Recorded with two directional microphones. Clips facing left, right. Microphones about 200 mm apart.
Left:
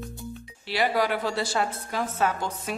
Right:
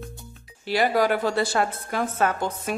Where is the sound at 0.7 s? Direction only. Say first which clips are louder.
Right 4 dB; 45° right (ahead or behind).